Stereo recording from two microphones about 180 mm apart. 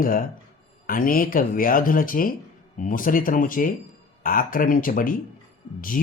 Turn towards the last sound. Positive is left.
turn(degrees=50)  # may be behind; listen again after turning